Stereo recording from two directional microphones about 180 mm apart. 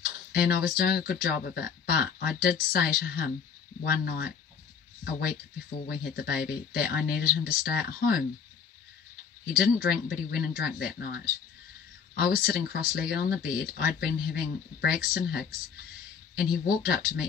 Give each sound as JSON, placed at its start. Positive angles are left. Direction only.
{"t": 0.0, "sound": "speech", "side_deg": 55}
{"t": 5.9, "sound": "speech", "side_deg": 60}
{"t": 9.6, "sound": "speech", "side_deg": 55}